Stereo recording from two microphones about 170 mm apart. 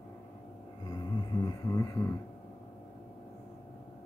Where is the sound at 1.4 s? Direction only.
20° left (ahead or behind).